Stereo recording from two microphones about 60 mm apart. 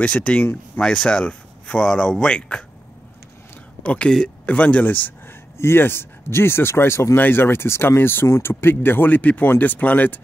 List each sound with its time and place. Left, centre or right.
0.0 s speech: centre
3.8 s speech: centre